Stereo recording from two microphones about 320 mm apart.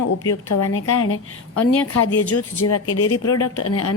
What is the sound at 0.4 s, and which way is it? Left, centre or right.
Speech, left.